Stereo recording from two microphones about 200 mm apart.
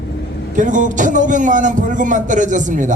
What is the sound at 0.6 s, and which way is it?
A man's voice, 40° right (ahead or behind).